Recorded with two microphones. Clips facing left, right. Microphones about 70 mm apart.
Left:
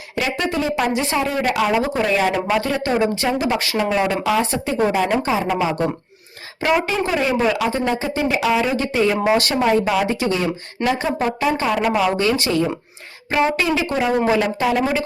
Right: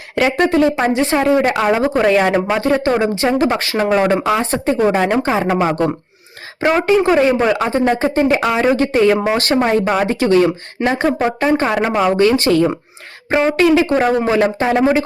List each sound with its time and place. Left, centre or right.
0.2 s speech: right
2.5 s speech: right
6.6 s speech: right
9.1 s speech: right
9.5 s speech: right
13.6 s speech: right
14.3 s speech: right